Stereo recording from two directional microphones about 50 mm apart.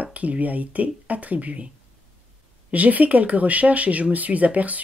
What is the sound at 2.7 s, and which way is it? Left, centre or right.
Speech, right.